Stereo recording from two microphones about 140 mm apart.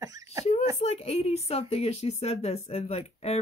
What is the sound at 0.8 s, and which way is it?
A woman's voice, 45° left (ahead or behind).